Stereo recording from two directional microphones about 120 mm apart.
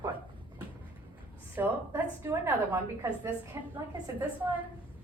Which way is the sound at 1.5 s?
15° right (ahead or behind).